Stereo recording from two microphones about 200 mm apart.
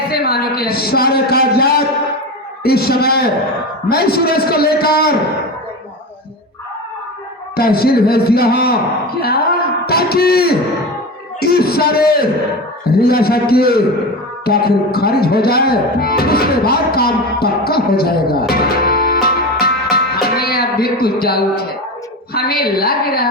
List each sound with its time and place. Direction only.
0.1 s a man's voice: 50° left (ahead or behind)
7.5 s a man's voice: 50° left (ahead or behind)
9.2 s a sound: 50° left (ahead or behind)
11.3 s a man's voice: 50° left (ahead or behind)